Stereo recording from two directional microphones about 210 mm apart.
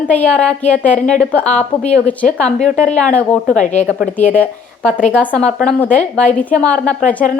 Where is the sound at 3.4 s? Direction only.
35° left (ahead or behind).